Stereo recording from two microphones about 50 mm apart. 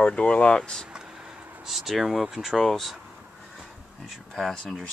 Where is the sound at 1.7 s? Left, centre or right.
Centre.